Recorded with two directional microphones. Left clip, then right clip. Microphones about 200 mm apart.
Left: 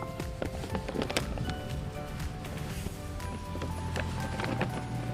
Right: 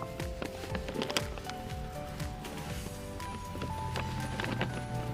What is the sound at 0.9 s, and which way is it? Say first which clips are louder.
Music: left 1 dB; 10° right (ahead or behind).